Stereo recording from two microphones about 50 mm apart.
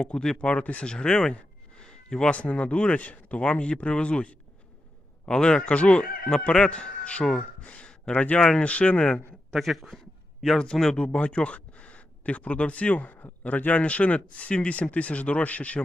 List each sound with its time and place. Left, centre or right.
0.0 s speech: centre
0.5 s speech: left
0.9 s a sound: centre
2.3 s speech: left
7.7 s a sound: left
8.1 s speech: left
9.5 s speech: centre
10.6 s speech: centre; by 15.8 s left